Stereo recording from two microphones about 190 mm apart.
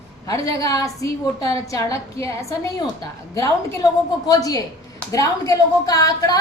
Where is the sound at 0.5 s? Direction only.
20° left (ahead or behind).